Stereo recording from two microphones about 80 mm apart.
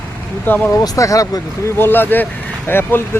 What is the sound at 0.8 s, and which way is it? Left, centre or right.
Speech, left.